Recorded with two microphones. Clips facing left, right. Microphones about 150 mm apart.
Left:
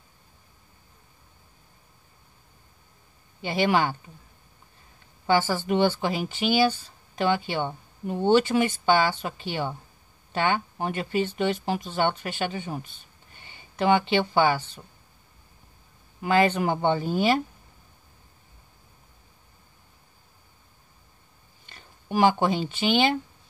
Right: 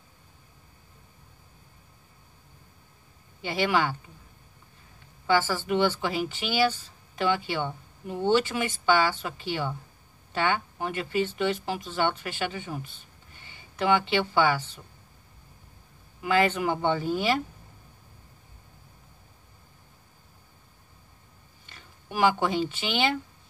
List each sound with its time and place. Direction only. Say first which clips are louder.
3.4 s speech: left 2 dB; 25° left (ahead or behind)
5.2 s speech: left 2 dB; 20° left (ahead or behind)
13.8 s speech: left 2 dB; 25° left (ahead or behind)
16.2 s speech: left 2 dB; 30° left (ahead or behind)
22.1 s speech: left 3 dB; 25° left (ahead or behind)